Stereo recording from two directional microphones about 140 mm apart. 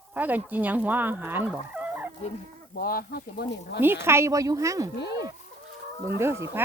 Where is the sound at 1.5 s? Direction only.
10° right (ahead or behind).